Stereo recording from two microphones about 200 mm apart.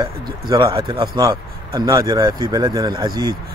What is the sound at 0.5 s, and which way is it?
Speech, 20° right (ahead or behind).